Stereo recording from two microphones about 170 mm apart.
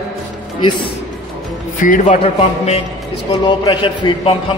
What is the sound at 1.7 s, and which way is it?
A man's voice, 50° left (ahead or behind).